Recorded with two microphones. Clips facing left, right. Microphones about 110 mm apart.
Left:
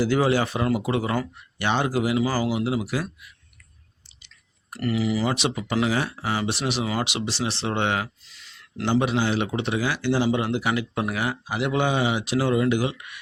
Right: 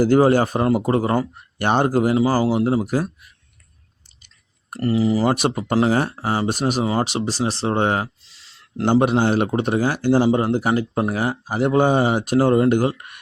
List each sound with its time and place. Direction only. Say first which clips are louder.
0.0 s speech: right 6 dB; 45° right (ahead or behind)
4.7 s speech: right 5 dB; 35° right (ahead or behind)
8.8 s speech: right 6 dB; 50° right (ahead or behind)